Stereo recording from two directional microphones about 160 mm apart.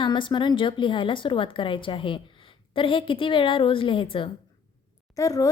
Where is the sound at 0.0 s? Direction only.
30° left (ahead or behind).